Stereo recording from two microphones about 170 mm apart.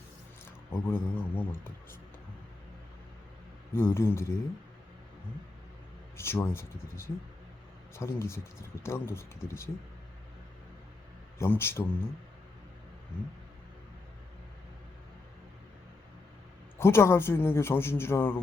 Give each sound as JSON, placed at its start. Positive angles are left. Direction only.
{"t": 0.7, "sound": "speech", "side_deg": 10}
{"t": 3.8, "sound": "speech", "side_deg": 15}
{"t": 6.1, "sound": "speech", "side_deg": 15}
{"t": 11.3, "sound": "speech", "side_deg": 15}
{"t": 16.7, "sound": "speech", "side_deg": 15}